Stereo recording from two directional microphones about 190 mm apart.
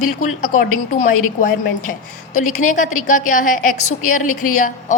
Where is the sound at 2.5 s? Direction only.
40° left (ahead or behind).